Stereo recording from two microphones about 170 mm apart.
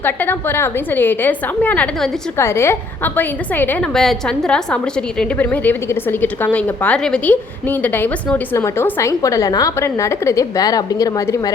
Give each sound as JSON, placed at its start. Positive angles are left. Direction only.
{"t": 0.0, "sound": "a woman's voice", "side_deg": 10}